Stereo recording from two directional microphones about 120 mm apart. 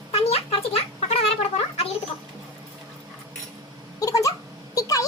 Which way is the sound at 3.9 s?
30° left (ahead or behind).